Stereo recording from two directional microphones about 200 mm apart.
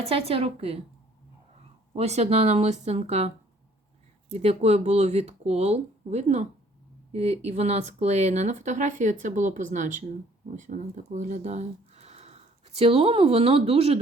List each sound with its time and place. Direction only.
0.1 s a woman's voice: 30° right (ahead or behind)
1.9 s speech: 35° right (ahead or behind)